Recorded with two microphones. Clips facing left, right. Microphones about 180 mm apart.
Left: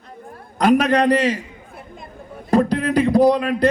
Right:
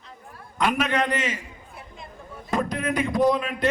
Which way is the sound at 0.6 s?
35° left (ahead or behind).